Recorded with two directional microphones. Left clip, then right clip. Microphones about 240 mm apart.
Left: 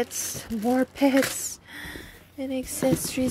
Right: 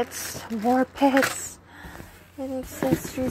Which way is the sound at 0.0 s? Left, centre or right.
Centre.